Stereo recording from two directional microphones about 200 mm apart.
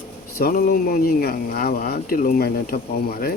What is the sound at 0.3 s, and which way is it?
Speech, 50° left (ahead or behind).